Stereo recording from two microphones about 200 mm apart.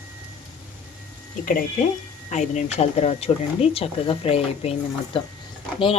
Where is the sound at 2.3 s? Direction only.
35° left (ahead or behind).